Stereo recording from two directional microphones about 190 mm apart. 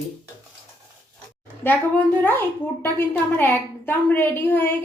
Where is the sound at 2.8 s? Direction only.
10° left (ahead or behind).